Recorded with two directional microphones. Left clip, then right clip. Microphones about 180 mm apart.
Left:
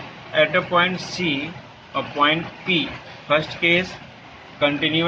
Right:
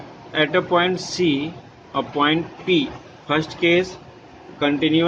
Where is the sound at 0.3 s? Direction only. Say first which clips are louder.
Left 1 dB; 65° right (ahead or behind).